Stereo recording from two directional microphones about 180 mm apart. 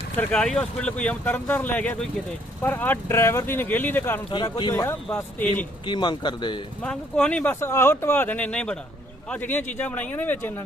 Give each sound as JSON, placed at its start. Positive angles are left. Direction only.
{"t": 0.2, "sound": "speech", "side_deg": 5}
{"t": 4.3, "sound": "speech", "side_deg": 25}
{"t": 4.7, "sound": "speech", "side_deg": 10}
{"t": 5.8, "sound": "speech", "side_deg": 25}
{"t": 6.8, "sound": "speech", "side_deg": 5}